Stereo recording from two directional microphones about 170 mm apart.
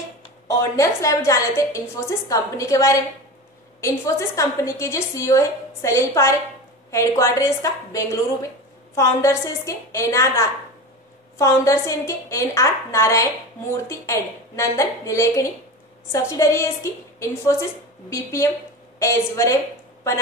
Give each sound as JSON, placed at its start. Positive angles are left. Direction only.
{"t": 0.5, "sound": "a woman's voice", "side_deg": 20}